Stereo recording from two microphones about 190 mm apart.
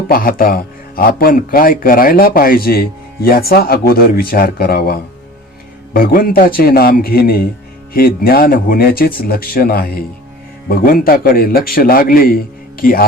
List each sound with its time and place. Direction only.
0.1 s a man's voice: 50° left (ahead or behind)